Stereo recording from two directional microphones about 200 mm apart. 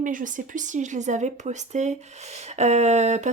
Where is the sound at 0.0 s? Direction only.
40° right (ahead or behind).